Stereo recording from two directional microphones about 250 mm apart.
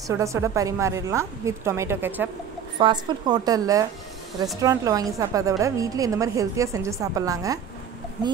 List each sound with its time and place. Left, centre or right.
0.1 s a woman's voice: centre